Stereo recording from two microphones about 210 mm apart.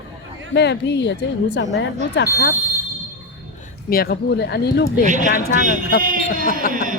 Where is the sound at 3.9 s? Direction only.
45° left (ahead or behind).